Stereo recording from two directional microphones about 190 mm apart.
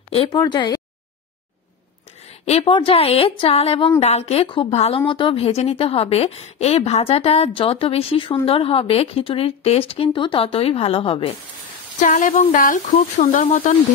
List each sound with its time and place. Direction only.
0.3 s speech: 20° left (ahead or behind)
2.4 s a woman's voice: 30° left (ahead or behind)
12.0 s speech: 45° left (ahead or behind)